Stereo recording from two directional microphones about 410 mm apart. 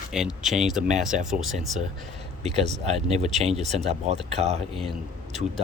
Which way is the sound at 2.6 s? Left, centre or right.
Centre.